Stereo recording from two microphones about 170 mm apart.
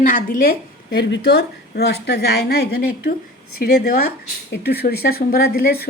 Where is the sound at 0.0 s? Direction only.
55° left (ahead or behind).